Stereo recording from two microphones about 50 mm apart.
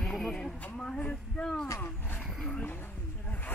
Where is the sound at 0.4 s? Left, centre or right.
Left.